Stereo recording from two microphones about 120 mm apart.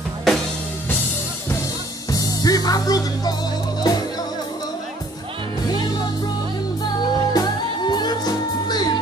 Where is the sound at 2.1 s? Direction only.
30° left (ahead or behind).